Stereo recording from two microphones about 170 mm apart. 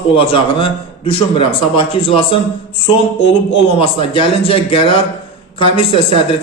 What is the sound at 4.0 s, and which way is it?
A man's voice, 30° left (ahead or behind).